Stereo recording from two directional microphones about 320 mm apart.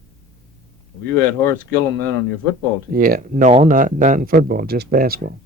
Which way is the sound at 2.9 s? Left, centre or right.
Right.